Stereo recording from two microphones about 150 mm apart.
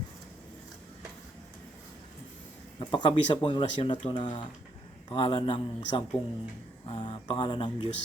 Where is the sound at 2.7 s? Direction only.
30° left (ahead or behind).